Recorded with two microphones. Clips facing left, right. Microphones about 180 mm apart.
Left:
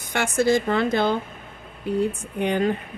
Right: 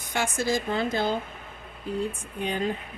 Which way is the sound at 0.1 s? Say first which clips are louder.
Left 6 dB; 65° left (ahead or behind).